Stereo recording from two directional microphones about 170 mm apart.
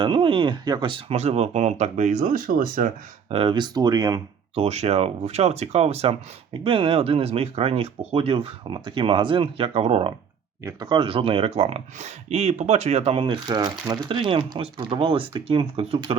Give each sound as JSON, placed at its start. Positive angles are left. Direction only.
{"t": 0.0, "sound": "speech", "side_deg": -30}
{"t": 3.2, "sound": "speech", "side_deg": -30}
{"t": 4.5, "sound": "speech", "side_deg": -40}
{"t": 10.6, "sound": "speech", "side_deg": -20}